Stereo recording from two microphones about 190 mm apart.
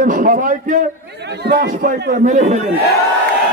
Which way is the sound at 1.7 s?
40° right (ahead or behind).